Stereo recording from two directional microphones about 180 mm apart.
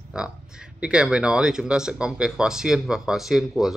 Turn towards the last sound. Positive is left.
turn(degrees=0)  # may be behind; listen again after turning